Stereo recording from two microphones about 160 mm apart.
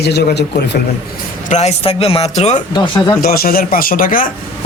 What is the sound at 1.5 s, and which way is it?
Speech, 45° left (ahead or behind).